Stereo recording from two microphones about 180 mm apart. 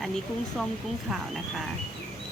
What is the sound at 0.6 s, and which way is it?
Speech, centre (ahead or behind).